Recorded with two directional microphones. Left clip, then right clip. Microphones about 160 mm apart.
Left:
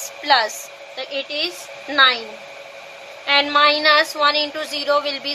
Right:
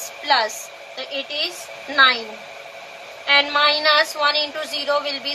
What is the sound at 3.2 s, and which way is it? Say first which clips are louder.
A woman's voice: left 1 dB; 45° left (ahead or behind).